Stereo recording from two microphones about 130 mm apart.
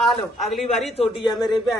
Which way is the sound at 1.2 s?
35° left (ahead or behind).